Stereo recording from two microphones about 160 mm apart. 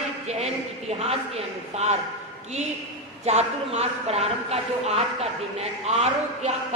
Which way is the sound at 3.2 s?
40° right (ahead or behind).